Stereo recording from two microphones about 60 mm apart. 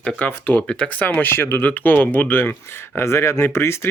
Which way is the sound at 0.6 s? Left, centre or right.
Centre.